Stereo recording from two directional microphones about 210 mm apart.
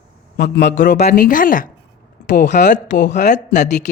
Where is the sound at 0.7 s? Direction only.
35° left (ahead or behind).